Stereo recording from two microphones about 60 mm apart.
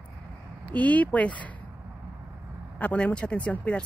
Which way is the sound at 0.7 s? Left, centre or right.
Left.